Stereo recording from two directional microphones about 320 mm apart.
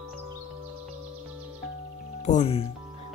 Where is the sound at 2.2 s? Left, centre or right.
Left.